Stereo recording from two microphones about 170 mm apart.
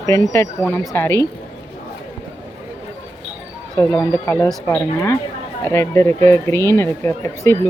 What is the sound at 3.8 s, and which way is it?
Speech, 15° left (ahead or behind).